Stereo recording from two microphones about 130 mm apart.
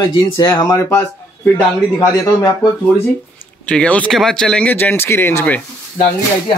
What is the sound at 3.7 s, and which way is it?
Speech, 10° left (ahead or behind).